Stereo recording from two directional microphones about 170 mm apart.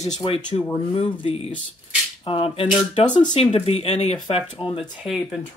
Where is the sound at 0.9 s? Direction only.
35° left (ahead or behind).